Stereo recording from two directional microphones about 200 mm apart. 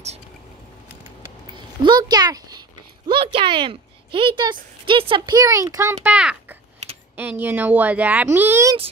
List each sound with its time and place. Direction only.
1.8 s a child's voice: 20° right (ahead or behind)